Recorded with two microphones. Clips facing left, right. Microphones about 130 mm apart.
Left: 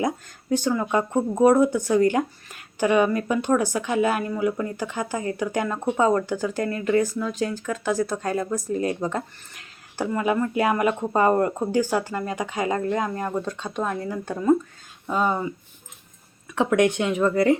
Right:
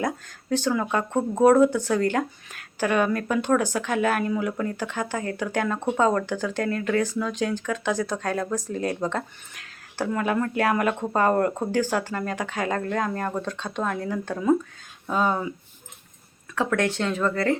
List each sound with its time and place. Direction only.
0.7 s speech: 5° left (ahead or behind)
16.6 s speech: 20° left (ahead or behind)